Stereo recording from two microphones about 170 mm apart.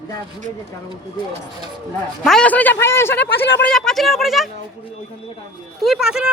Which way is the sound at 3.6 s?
5° left (ahead or behind).